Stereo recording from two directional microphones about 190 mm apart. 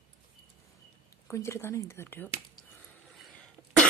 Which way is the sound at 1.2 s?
15° left (ahead or behind).